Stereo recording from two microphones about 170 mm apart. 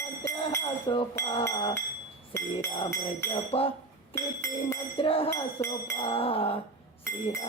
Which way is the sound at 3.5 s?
35° left (ahead or behind).